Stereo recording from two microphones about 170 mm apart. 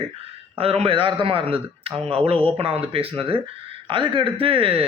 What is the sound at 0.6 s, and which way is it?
A man's voice, 35° right (ahead or behind).